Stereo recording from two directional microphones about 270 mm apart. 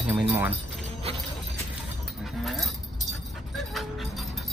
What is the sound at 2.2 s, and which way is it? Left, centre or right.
Dog, centre.